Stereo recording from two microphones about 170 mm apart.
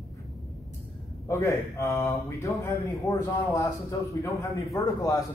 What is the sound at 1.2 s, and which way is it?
A man's voice, 15° left (ahead or behind).